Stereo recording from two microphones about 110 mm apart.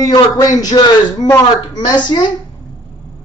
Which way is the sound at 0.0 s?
35° left (ahead or behind).